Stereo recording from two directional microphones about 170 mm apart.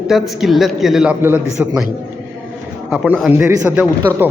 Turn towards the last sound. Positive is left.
turn(degrees=-10)  # may be behind; listen again after turning